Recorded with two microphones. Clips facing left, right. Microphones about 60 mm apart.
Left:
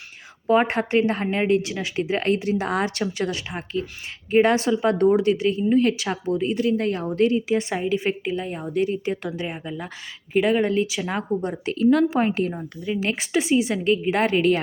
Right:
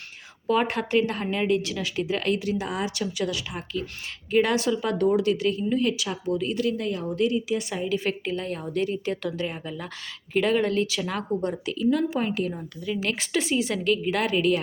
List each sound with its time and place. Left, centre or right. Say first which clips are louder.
0.4 s a woman's voice: left 4 dB; left
2.6 s a woman's voice: left 5 dB; left
5.7 s a woman's voice: left 5 dB; left
6.2 s a woman's voice: left 3 dB; left
6.8 s a woman's voice: left 4 dB; left
7.9 s a woman's voice: left 3 dB; centre
11.6 s a woman's voice: left 8 dB; left
12.1 s a woman's voice: left 5 dB; left
12.5 s a woman's voice: left 3 dB; left